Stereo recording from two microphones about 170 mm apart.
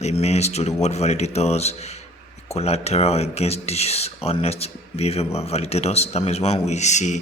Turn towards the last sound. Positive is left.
turn(degrees=45)  # may be behind; listen again after turning